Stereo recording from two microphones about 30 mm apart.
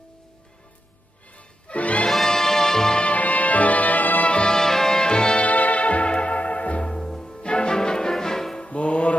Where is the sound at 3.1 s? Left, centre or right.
Left.